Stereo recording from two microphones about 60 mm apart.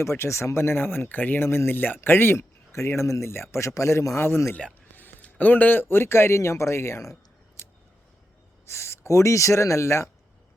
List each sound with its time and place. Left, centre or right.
0.0 s speech: left
1.5 s speech: left
2.7 s speech: left
3.8 s speech: left
4.9 s speech: left
8.7 s speech: left